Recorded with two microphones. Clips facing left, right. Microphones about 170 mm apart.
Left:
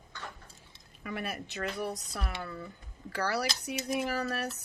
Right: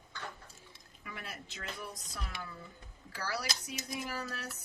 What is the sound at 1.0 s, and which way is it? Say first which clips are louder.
A woman's voice: left 9 dB; 65° left (ahead or behind).